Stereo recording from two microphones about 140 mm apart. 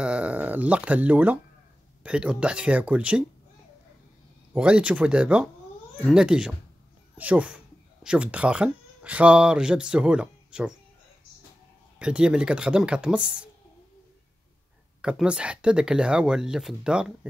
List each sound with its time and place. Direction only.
0.0 s speech: 10° right (ahead or behind)
4.6 s speech: 10° right (ahead or behind)
12.0 s speech: 10° right (ahead or behind)
15.0 s speech: 5° right (ahead or behind)